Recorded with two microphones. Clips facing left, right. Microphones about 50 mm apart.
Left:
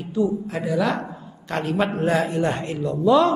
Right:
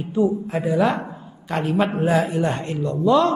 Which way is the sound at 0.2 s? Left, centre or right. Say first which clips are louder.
Right 2 dB; right.